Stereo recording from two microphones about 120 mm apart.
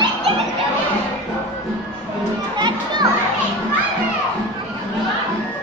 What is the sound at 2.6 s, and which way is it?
Children playing, 40° right (ahead or behind).